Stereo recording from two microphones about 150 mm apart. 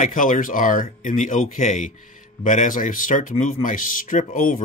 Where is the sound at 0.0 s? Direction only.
60° left (ahead or behind).